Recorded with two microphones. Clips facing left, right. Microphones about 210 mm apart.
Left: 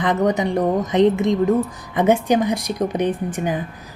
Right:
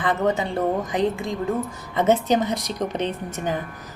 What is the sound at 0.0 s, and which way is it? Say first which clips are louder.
A woman's voice: left 4 dB; 15° left (ahead or behind).